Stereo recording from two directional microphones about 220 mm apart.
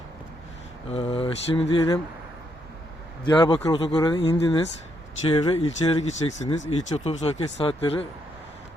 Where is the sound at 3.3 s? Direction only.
20° left (ahead or behind).